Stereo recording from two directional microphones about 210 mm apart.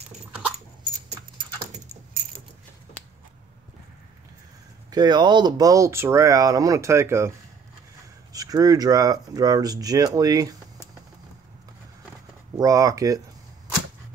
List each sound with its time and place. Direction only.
4.9 s speech: 20° right (ahead or behind)
12.5 s speech: 15° right (ahead or behind)